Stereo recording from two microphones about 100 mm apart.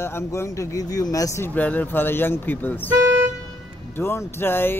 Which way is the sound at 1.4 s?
15° left (ahead or behind).